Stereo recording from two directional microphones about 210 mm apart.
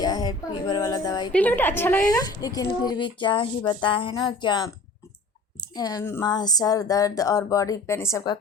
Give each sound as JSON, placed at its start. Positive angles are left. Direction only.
{"t": 0.0, "sound": "a woman's voice", "side_deg": 20}